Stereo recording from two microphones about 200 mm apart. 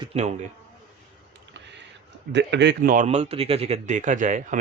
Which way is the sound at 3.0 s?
30° right (ahead or behind).